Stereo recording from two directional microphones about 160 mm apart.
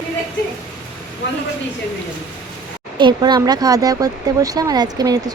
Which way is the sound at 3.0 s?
25° right (ahead or behind).